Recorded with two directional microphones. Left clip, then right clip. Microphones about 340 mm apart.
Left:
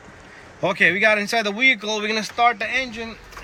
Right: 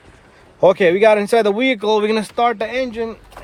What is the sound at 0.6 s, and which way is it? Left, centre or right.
Speech, centre.